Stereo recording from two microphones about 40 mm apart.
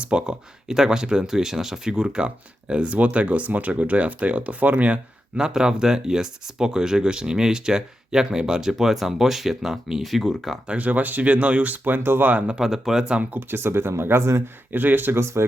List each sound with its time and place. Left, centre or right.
0.0 s speech: right
0.7 s speech: centre
1.9 s speech: right
5.4 s speech: centre
10.7 s speech: right
11.9 s speech: right
12.5 s speech: centre
13.5 s speech: right
14.7 s speech: right